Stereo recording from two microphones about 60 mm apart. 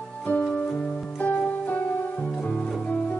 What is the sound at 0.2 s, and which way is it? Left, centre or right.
Music, left.